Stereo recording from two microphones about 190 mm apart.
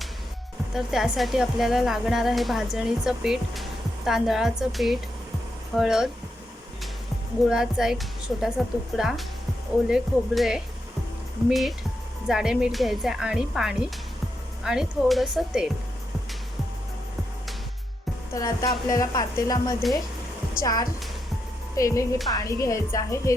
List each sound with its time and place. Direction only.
0.7 s speech: centre (ahead or behind)
7.5 s speech: centre (ahead or behind)
18.3 s a woman's voice: 20° left (ahead or behind)
20.6 s a woman's voice: 50° left (ahead or behind)
21.8 s a woman's voice: 15° left (ahead or behind)